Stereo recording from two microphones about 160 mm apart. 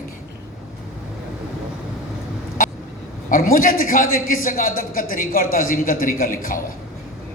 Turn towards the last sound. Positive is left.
turn(degrees=60)  # may be behind; listen again after turning